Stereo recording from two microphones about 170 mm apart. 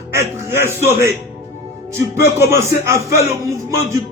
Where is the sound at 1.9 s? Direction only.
15° right (ahead or behind).